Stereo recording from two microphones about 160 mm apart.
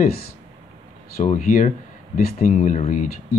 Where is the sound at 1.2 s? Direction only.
55° left (ahead or behind).